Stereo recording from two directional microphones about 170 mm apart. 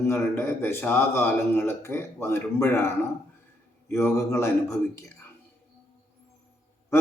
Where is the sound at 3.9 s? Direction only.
15° left (ahead or behind).